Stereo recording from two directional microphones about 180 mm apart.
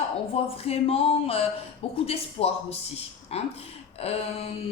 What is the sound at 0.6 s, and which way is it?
Speech, 35° left (ahead or behind).